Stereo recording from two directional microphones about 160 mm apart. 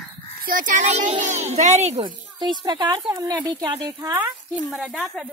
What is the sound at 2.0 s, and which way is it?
Speech, 25° right (ahead or behind).